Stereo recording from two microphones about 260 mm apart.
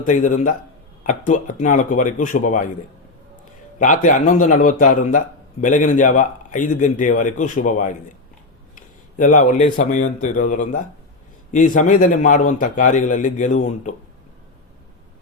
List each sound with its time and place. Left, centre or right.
0.0 s speech: left
3.8 s speech: left
9.1 s a man's voice: left